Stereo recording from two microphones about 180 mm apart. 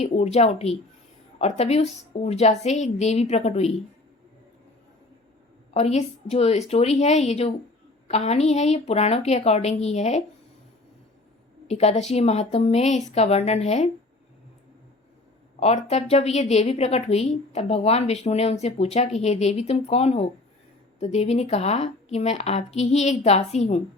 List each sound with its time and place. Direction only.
0.0 s a woman's voice: 35° left (ahead or behind)
5.7 s a woman's voice: 35° left (ahead or behind)
11.7 s a woman's voice: 35° left (ahead or behind)
15.6 s a woman's voice: 35° left (ahead or behind)